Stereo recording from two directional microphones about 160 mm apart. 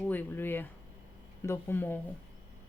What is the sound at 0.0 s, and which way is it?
Speech, 10° left (ahead or behind).